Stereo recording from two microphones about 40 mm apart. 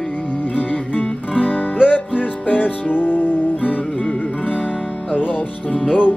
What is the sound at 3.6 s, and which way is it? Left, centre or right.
Music, left.